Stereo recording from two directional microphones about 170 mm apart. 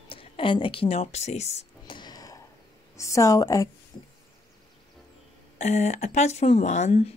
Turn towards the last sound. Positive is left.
turn(degrees=45)  # may be behind; listen again after turning